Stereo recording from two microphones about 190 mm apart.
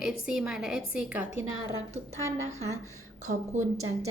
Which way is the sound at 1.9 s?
35° right (ahead or behind).